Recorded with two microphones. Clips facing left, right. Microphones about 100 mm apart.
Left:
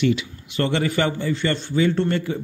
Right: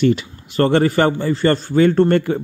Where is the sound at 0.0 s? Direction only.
45° right (ahead or behind).